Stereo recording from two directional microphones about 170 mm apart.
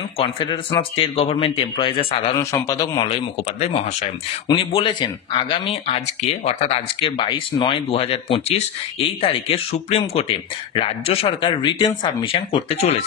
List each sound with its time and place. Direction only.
0.2 s speech: 30° left (ahead or behind)
2.3 s speech: 20° left (ahead or behind)
4.5 s speech: 30° left (ahead or behind)